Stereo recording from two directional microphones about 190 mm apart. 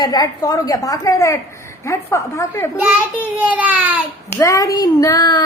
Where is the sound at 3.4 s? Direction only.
5° right (ahead or behind).